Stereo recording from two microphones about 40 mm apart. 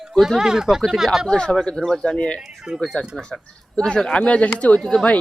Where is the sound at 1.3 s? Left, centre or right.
Left.